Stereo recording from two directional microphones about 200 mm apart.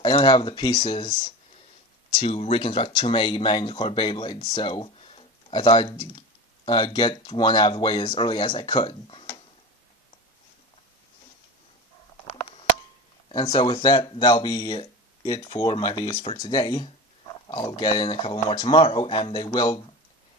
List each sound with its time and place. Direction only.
0.0 s speech: 25° left (ahead or behind)
13.3 s speech: 25° left (ahead or behind)